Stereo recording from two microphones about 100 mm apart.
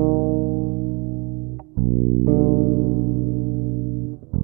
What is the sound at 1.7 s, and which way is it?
Music, 5° left (ahead or behind).